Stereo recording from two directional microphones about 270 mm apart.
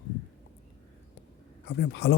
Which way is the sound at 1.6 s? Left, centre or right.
Left.